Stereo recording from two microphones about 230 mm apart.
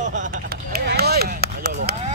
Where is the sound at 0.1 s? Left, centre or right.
Right.